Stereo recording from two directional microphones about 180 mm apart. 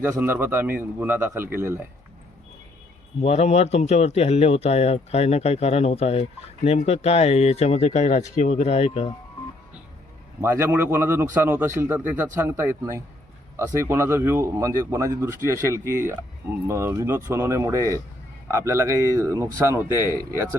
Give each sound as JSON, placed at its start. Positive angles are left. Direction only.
{"t": 0.0, "sound": "a man's voice", "side_deg": -10}
{"t": 3.2, "sound": "a man's voice", "side_deg": 35}
{"t": 10.4, "sound": "a man's voice", "side_deg": -15}